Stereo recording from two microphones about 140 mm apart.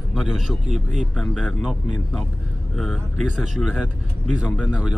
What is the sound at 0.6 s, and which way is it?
Speech, 55° right (ahead or behind).